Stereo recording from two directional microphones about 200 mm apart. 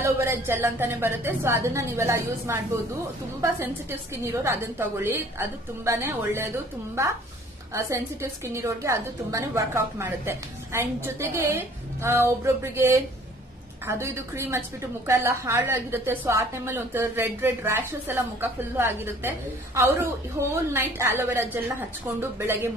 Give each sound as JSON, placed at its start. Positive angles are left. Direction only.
{"t": 0.0, "sound": "a woman's voice", "side_deg": -10}